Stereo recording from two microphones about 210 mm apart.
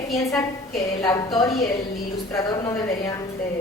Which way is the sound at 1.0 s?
20° left (ahead or behind).